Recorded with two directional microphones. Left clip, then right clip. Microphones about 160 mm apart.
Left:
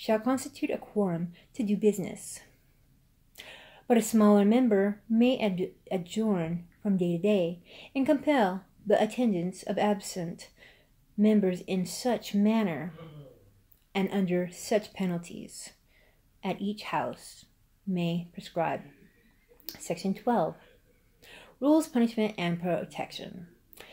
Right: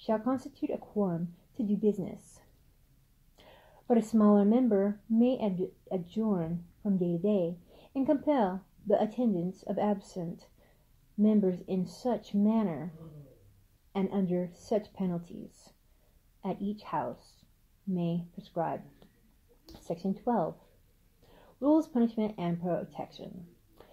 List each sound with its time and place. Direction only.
0.0 s speech: 15° left (ahead or behind)
0.9 s speech: 25° left (ahead or behind)
1.5 s speech: 15° left (ahead or behind)
3.3 s a sound: 10° left (ahead or behind)
4.6 s speech: 25° left (ahead or behind)
5.2 s speech: 10° left (ahead or behind)
13.9 s speech: 15° left (ahead or behind)